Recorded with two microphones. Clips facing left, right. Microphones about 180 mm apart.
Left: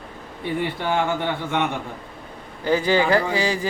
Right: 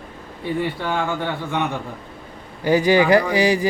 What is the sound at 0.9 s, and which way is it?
Speech, 20° left (ahead or behind).